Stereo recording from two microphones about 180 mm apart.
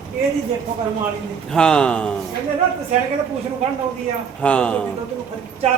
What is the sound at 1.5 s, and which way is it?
Speech, 5° left (ahead or behind).